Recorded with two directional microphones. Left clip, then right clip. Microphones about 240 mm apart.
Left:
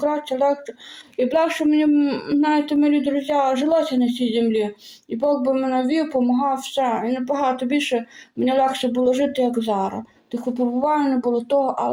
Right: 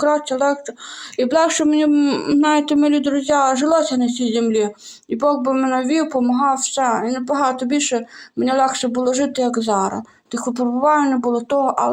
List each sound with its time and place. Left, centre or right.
0.0 s speech: centre
7.3 s speech: right
7.9 s speech: centre